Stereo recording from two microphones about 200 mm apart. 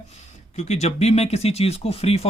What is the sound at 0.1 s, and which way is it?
Speech, 35° left (ahead or behind).